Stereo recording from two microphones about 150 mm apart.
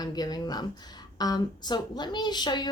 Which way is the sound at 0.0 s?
25° left (ahead or behind).